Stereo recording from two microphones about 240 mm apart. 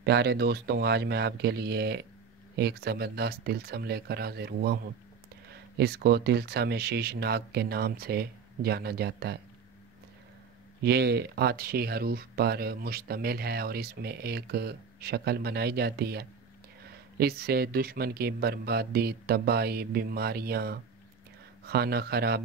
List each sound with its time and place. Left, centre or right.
0.0 s speech: right
10.8 s speech: right